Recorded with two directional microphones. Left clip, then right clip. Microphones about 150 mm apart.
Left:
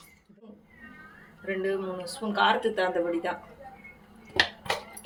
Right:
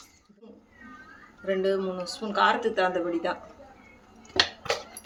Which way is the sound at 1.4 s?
35° right (ahead or behind).